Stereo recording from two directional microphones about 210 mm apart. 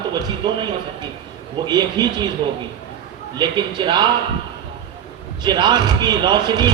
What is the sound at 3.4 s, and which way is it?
Speech, 20° right (ahead or behind).